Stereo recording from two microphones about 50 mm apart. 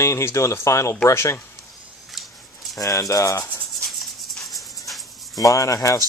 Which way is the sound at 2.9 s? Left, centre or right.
Left.